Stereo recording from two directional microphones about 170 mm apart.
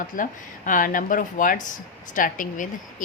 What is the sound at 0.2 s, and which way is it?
A woman's voice, 50° left (ahead or behind).